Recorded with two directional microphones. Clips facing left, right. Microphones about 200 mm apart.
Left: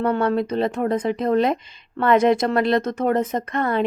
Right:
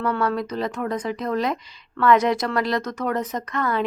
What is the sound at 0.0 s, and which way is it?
Speech, 30° left (ahead or behind).